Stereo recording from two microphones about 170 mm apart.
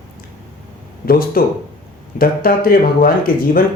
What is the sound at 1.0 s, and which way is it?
Speech, 60° left (ahead or behind).